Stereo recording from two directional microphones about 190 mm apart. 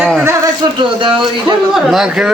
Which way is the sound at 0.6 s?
25° right (ahead or behind).